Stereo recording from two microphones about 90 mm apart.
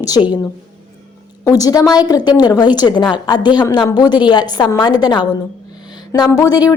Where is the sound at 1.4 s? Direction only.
45° left (ahead or behind).